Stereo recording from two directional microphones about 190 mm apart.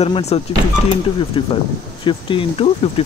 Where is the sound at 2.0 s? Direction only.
25° left (ahead or behind).